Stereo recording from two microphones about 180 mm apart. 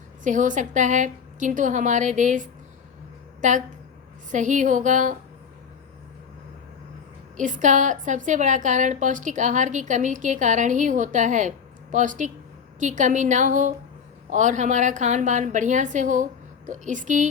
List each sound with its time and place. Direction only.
0.3 s a woman's voice: 45° right (ahead or behind)
7.3 s a woman's voice: 45° right (ahead or behind)